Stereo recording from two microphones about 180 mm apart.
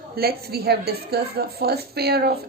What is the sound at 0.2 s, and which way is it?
A woman's voice, 60° right (ahead or behind).